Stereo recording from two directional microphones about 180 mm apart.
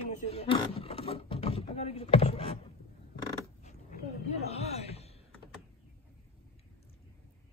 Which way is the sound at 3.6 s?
40° left (ahead or behind).